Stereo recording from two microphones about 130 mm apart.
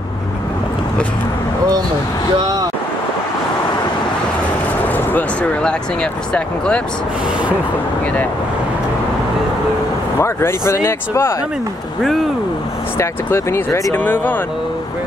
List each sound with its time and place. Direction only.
4.8 s a sound: 15° left (ahead or behind)
6.3 s speech: 5° left (ahead or behind)
10.1 s speech: 20° left (ahead or behind)
12.9 s speech: 20° left (ahead or behind)